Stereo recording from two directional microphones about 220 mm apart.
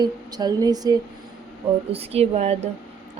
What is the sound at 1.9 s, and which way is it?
Speech, 25° right (ahead or behind).